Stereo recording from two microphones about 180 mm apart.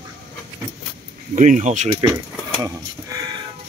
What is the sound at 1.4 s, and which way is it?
Speech, 45° right (ahead or behind).